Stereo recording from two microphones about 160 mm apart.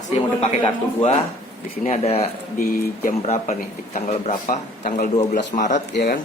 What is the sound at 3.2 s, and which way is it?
A man's voice, 45° left (ahead or behind).